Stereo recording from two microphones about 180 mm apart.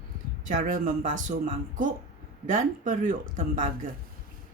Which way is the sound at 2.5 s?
45° right (ahead or behind).